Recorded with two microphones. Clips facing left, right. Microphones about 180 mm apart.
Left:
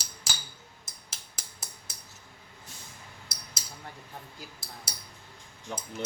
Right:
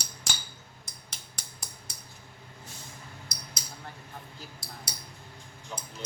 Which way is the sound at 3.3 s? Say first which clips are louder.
Right 3 dB; 5° left (ahead or behind).